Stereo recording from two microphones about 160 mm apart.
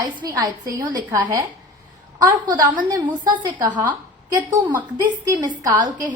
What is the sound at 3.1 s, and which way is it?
Speech, 25° right (ahead or behind).